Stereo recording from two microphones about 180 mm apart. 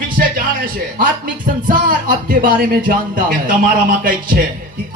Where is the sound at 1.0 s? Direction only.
50° right (ahead or behind).